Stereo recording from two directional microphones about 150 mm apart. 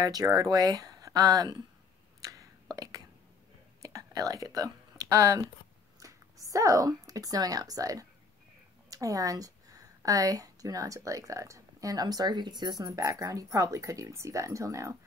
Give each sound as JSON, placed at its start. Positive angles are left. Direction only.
{"t": 0.0, "sound": "a woman's voice", "side_deg": -25}
{"t": 2.2, "sound": "a sound", "side_deg": -25}
{"t": 3.8, "sound": "a woman's voice", "side_deg": -25}